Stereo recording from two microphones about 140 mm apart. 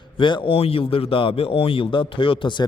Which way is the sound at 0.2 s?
35° left (ahead or behind).